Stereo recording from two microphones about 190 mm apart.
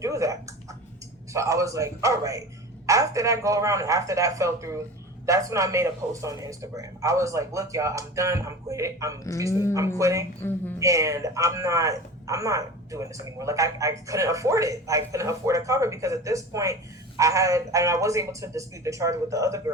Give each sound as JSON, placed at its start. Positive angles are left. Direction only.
{"t": 0.0, "sound": "a sound", "side_deg": -15}
{"t": 1.3, "sound": "a man's voice", "side_deg": -15}
{"t": 9.5, "sound": "speech", "side_deg": 15}
{"t": 10.0, "sound": "a man's voice", "side_deg": -15}